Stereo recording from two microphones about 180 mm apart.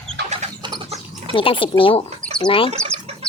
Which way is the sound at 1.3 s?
30° left (ahead or behind).